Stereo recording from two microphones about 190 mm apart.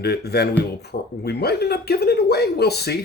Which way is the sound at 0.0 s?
60° left (ahead or behind).